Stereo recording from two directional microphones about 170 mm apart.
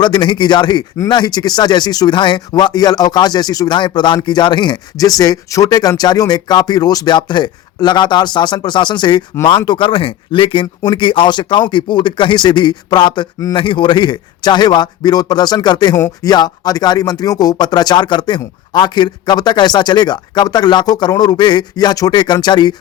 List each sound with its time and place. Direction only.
0.0 s speech: 25° left (ahead or behind)